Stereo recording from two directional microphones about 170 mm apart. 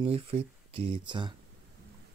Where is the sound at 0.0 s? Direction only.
35° right (ahead or behind).